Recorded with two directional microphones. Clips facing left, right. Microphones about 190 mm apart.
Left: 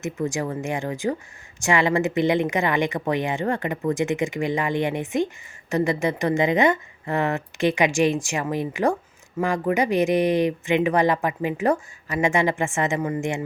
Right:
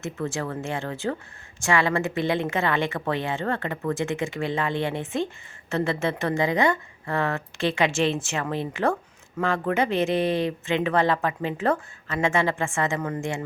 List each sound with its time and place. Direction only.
0.0 s speech: 15° left (ahead or behind)